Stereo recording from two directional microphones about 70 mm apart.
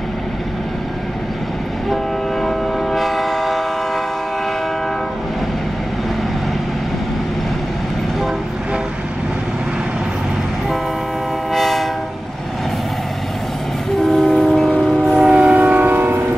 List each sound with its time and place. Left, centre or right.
2.4 s train: centre
11.5 s train: centre
14.0 s train: centre
15.5 s train: right